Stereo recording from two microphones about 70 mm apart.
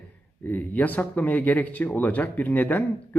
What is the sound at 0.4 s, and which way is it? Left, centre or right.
Speech, left.